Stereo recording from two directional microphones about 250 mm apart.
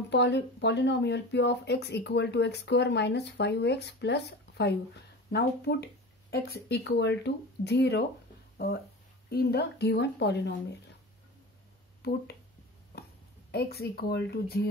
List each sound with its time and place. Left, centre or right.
0.1 s speech: left
9.3 s speech: left
12.0 s speech: left
13.5 s speech: left